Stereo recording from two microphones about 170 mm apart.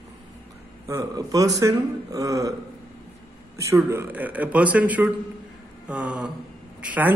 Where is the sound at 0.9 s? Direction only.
20° right (ahead or behind).